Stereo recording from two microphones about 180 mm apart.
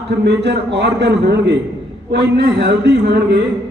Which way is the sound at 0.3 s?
65° right (ahead or behind).